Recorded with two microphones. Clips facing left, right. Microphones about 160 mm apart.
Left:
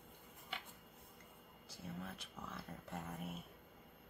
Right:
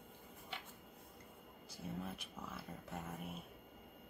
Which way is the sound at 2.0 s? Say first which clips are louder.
Right 2 dB; 10° right (ahead or behind).